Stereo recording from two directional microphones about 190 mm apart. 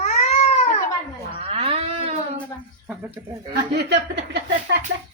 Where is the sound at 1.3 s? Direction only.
30° right (ahead or behind).